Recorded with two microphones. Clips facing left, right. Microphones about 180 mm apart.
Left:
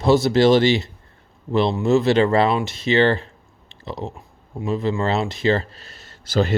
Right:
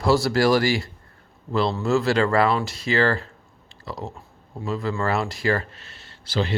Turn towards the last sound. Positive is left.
turn(degrees=45)  # may be behind; listen again after turning